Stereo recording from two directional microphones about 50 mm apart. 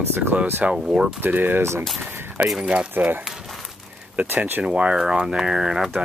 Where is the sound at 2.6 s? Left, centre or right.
Centre.